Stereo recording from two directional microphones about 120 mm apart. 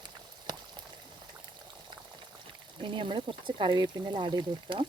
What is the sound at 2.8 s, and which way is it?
Speech, 40° right (ahead or behind).